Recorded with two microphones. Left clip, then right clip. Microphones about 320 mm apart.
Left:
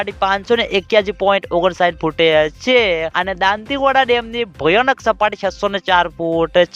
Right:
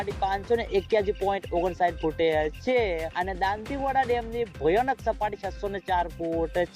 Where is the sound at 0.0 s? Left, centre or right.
Left.